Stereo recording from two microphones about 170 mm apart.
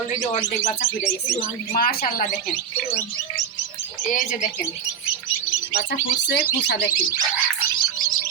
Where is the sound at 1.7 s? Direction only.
60° left (ahead or behind).